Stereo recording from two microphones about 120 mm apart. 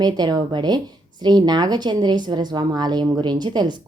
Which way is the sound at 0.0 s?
35° right (ahead or behind).